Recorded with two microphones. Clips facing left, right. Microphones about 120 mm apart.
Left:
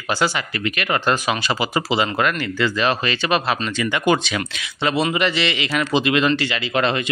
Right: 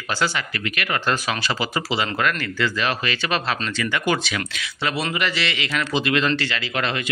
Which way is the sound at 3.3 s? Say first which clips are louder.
Left 5 dB; 15° left (ahead or behind).